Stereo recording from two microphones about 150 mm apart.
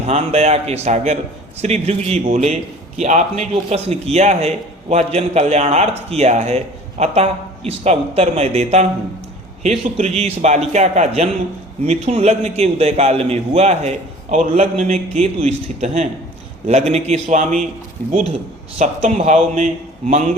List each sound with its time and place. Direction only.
0.0 s a man's voice: 45° right (ahead or behind)
18.0 s speech: 10° left (ahead or behind)
18.8 s a man's voice: 50° right (ahead or behind)